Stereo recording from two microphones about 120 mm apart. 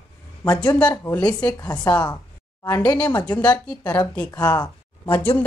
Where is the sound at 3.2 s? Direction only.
10° left (ahead or behind).